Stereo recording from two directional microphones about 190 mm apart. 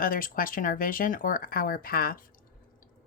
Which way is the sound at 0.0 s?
50° left (ahead or behind).